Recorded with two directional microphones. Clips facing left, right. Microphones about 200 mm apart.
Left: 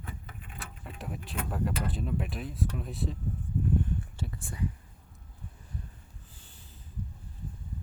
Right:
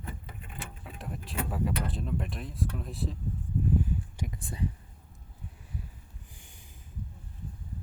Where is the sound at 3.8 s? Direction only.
15° right (ahead or behind).